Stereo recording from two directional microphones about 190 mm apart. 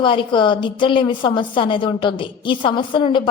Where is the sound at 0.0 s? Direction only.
25° left (ahead or behind).